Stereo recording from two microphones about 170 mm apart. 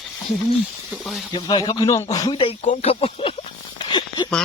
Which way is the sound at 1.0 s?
Centre (ahead or behind).